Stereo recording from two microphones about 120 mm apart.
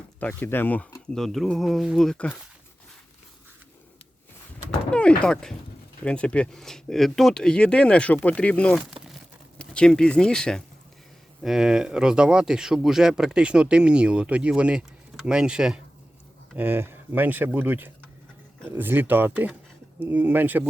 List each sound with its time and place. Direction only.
0.2 s speech: 15° left (ahead or behind)
4.9 s speech: 10° left (ahead or behind)
11.4 s speech: 5° right (ahead or behind)
16.6 s speech: 15° right (ahead or behind)